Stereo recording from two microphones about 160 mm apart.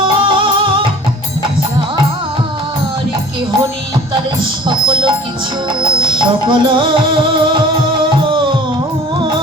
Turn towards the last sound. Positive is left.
turn(degrees=-30)  # may be behind; listen again after turning